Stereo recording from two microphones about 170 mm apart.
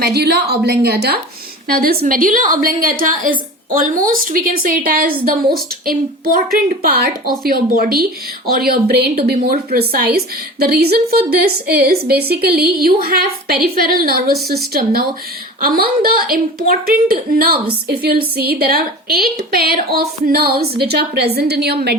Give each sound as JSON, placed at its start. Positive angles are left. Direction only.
{"t": 0.0, "sound": "a woman's voice", "side_deg": -70}
{"t": 1.6, "sound": "a woman's voice", "side_deg": -60}